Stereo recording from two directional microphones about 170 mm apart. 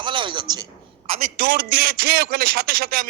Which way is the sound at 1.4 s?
60° right (ahead or behind).